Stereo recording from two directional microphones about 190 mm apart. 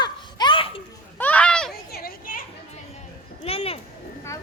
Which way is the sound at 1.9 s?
50° left (ahead or behind).